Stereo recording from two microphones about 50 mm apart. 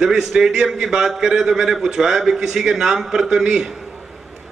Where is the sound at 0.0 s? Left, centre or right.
Centre.